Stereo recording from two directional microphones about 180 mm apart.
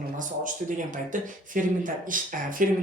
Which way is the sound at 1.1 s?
50° right (ahead or behind).